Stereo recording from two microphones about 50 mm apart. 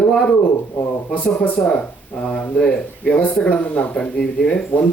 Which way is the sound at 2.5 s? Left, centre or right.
Left.